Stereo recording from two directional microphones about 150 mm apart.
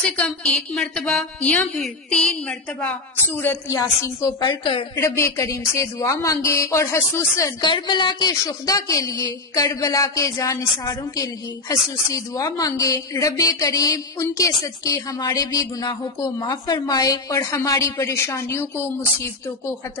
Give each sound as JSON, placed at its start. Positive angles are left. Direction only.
{"t": 0.7, "sound": "a woman's voice", "side_deg": 5}
{"t": 5.0, "sound": "a woman's voice", "side_deg": 20}
{"t": 7.6, "sound": "a woman's voice", "side_deg": 30}
{"t": 12.1, "sound": "a woman's voice", "side_deg": 25}